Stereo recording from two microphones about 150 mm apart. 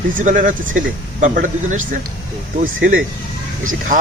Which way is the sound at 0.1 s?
60° right (ahead or behind).